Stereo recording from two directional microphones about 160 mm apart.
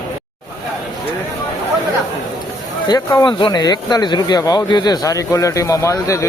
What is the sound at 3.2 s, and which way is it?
Speech, 30° left (ahead or behind).